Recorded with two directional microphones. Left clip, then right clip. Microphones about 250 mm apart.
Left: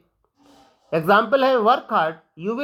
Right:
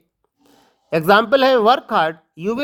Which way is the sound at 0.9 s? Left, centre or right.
Right.